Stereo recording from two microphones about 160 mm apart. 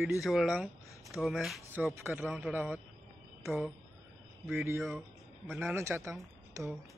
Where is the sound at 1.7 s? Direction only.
10° right (ahead or behind).